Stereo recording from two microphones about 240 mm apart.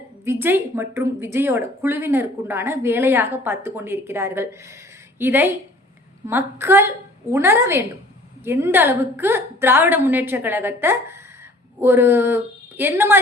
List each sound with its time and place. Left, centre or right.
0.3 s speech: centre